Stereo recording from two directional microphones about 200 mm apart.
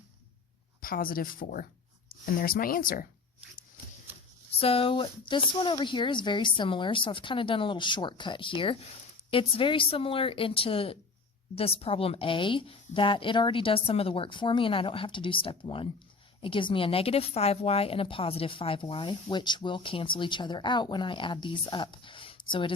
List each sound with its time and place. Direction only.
0.8 s speech: 45° left (ahead or behind)
4.6 s a woman's voice: 30° left (ahead or behind)